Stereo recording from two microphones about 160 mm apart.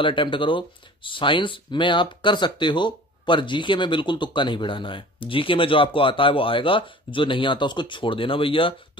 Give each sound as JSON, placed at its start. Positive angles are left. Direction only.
{"t": 0.0, "sound": "speech", "side_deg": 30}